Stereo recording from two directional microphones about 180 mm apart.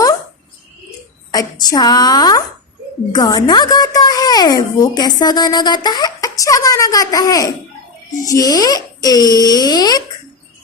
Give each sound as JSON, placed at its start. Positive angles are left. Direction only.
{"t": 1.3, "sound": "a woman's voice", "side_deg": 20}